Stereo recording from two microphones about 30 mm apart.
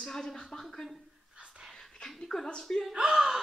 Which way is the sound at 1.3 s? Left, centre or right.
Right.